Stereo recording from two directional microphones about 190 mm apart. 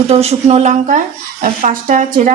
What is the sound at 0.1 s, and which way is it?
Speech, 35° right (ahead or behind).